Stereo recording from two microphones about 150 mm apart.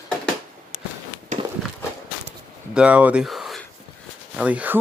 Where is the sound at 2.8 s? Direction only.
10° right (ahead or behind).